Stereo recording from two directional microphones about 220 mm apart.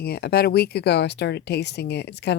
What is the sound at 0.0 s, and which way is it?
Speech, 45° left (ahead or behind).